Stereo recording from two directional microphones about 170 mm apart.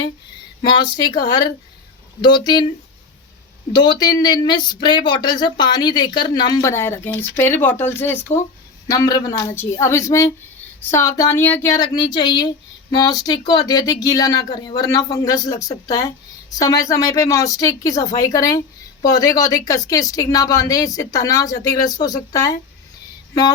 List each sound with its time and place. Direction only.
0.6 s speech: 25° left (ahead or behind)
3.7 s a woman's voice: 25° left (ahead or behind)